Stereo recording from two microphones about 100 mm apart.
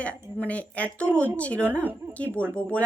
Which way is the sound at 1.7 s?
20° right (ahead or behind).